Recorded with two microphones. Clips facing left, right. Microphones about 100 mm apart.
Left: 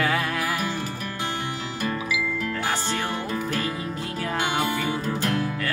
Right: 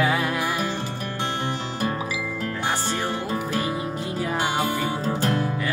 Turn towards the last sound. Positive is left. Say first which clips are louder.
# right 2 dB
turn(degrees=-30)  # may be behind; listen again after turning